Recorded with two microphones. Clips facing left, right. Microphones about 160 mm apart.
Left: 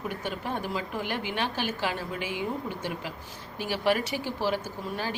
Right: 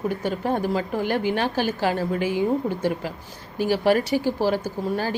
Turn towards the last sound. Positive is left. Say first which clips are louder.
# right 8 dB
turn(degrees=-40)  # may be behind; listen again after turning